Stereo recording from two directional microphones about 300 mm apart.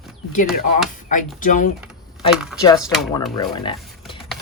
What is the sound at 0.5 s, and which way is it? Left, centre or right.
Speech, left.